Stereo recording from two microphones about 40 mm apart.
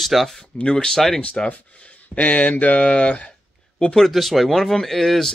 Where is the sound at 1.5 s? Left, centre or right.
Left.